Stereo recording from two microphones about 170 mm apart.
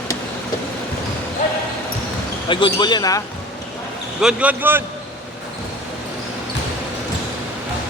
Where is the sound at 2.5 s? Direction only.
30° left (ahead or behind).